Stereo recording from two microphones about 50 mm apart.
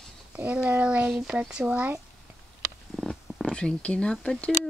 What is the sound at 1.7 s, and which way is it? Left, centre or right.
Speech, right.